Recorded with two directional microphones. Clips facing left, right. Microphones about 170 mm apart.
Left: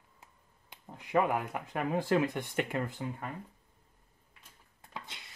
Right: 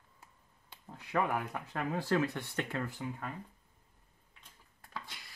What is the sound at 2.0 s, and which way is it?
Speech, 15° left (ahead or behind).